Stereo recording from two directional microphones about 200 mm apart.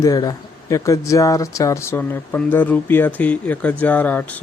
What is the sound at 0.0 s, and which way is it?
Speech, 15° left (ahead or behind).